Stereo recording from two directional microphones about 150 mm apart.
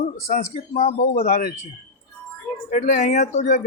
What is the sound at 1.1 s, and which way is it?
Speech, 75° left (ahead or behind).